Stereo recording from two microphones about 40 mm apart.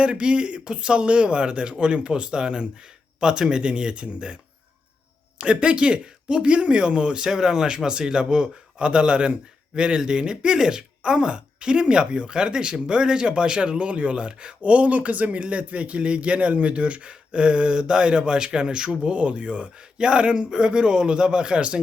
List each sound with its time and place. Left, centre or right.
0.0 s speech: right
5.4 s speech: right